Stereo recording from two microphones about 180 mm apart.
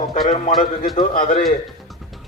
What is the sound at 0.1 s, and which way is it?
Speech, 40° left (ahead or behind).